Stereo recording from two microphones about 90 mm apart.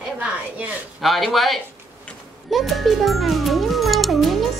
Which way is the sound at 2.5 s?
Centre (ahead or behind).